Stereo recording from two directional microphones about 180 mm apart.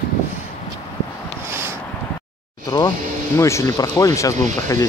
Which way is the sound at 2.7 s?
20° left (ahead or behind).